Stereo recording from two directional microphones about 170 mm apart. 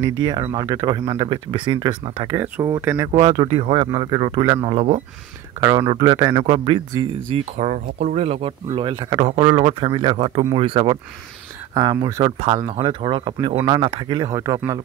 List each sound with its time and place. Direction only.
0.0 s speech: 20° right (ahead or behind)
2.3 s speech: 10° right (ahead or behind)
3.1 s speech: 25° right (ahead or behind)
7.5 s speech: 45° right (ahead or behind); by 12.4 s 25° right (ahead or behind)
12.4 s speech: 35° right (ahead or behind); by 14.8 s 20° right (ahead or behind)